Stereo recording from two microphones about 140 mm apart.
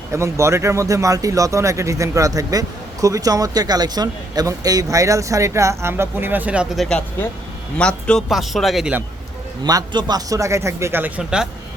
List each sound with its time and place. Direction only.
0.1 s a man's voice: 20° right (ahead or behind); by 9.0 s 5° right (ahead or behind)
9.6 s speech: 30° right (ahead or behind)
11.2 s a man's voice: 5° right (ahead or behind)